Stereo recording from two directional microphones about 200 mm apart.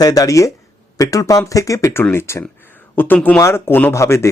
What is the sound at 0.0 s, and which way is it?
Speech, 20° left (ahead or behind).